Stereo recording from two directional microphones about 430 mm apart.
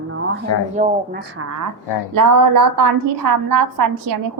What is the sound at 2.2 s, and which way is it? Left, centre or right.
A woman's voice, right.